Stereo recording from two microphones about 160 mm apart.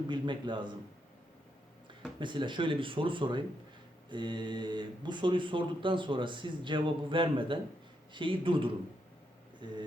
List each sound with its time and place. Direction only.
0.1 s a man's voice: 30° right (ahead or behind)
2.1 s a man's voice: 30° right (ahead or behind)